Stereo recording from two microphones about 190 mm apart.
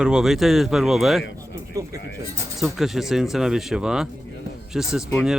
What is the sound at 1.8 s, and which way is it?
Speech, 15° right (ahead or behind).